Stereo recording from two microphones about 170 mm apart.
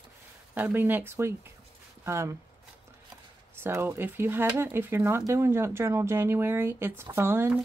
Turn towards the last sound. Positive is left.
turn(degrees=-15)  # may be behind; listen again after turning